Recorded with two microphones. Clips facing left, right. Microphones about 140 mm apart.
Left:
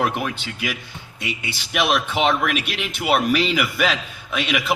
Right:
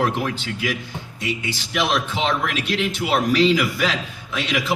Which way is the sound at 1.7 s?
65° left (ahead or behind).